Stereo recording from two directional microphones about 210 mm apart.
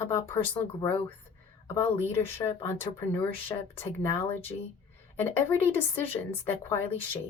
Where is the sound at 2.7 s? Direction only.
10° left (ahead or behind).